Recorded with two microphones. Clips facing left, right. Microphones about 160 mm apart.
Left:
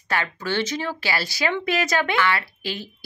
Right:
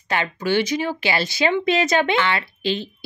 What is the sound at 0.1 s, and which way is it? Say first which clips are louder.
Speech: right 4 dB; 15° right (ahead or behind).